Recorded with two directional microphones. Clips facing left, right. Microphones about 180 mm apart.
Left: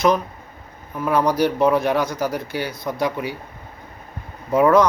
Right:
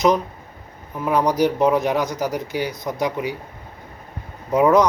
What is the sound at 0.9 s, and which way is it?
Speech, 20° right (ahead or behind).